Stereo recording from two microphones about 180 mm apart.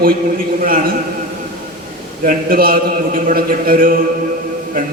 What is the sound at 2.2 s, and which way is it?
A man's voice, 50° right (ahead or behind).